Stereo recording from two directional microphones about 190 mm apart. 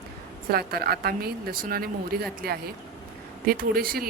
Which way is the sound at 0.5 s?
55° right (ahead or behind).